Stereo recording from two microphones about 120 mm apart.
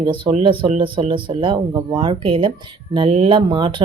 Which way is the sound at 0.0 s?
50° right (ahead or behind).